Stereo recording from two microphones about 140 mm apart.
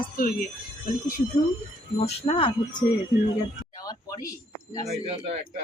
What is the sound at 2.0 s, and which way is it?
Speech, 45° left (ahead or behind).